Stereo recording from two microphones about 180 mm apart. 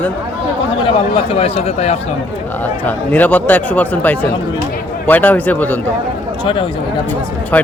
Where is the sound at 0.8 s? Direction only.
30° left (ahead or behind).